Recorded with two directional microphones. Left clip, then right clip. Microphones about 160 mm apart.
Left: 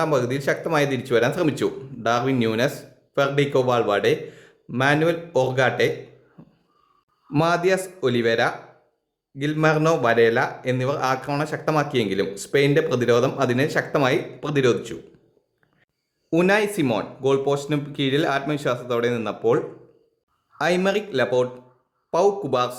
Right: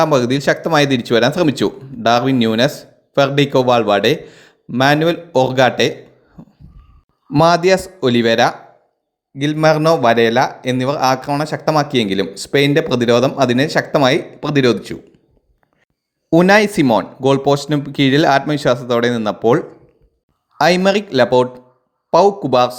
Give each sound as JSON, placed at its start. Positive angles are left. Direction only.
{"t": 0.0, "sound": "a man's voice", "side_deg": -35}
{"t": 7.3, "sound": "speech", "side_deg": -35}
{"t": 16.3, "sound": "speech", "side_deg": -40}